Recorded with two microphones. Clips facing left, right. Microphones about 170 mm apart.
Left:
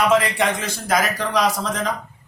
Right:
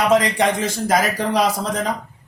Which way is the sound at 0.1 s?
35° right (ahead or behind).